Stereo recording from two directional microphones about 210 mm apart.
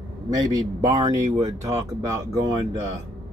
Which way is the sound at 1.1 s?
15° right (ahead or behind).